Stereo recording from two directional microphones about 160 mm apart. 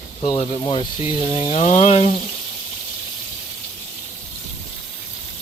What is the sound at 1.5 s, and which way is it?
Frying, 50° left (ahead or behind).